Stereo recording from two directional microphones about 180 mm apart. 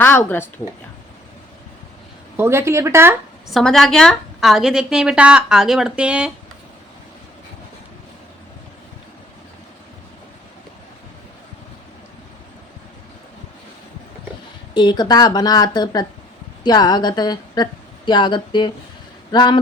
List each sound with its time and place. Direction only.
0.0 s speech: 10° left (ahead or behind)
2.3 s speech: 15° right (ahead or behind)
3.5 s a woman's voice: centre (ahead or behind)
14.7 s a woman's voice: 25° left (ahead or behind)